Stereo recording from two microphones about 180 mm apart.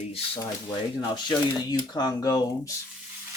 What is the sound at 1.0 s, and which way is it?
Speech, 25° left (ahead or behind).